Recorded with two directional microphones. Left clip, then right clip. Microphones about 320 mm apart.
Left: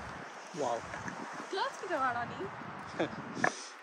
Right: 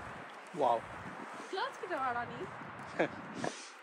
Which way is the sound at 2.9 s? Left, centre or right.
Right.